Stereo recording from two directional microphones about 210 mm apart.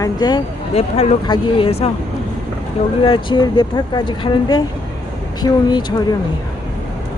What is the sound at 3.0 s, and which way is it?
A woman's voice, 25° left (ahead or behind).